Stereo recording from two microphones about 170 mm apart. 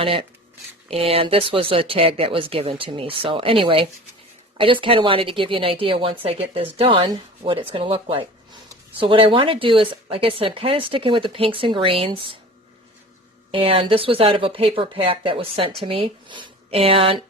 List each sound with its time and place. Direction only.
0.0 s speech: 35° right (ahead or behind)
13.5 s speech: 30° right (ahead or behind)